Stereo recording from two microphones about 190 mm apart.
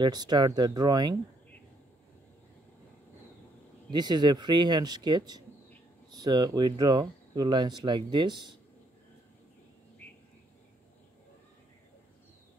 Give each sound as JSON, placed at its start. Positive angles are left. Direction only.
{"t": 0.0, "sound": "speech", "side_deg": -20}
{"t": 3.9, "sound": "speech", "side_deg": -20}